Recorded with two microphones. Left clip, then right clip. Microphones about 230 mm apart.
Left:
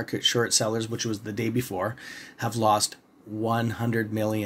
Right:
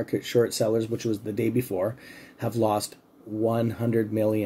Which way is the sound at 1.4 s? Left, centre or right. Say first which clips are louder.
Right 2 dB; left.